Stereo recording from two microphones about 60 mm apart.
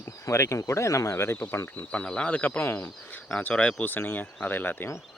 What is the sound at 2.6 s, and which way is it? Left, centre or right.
Speech, left.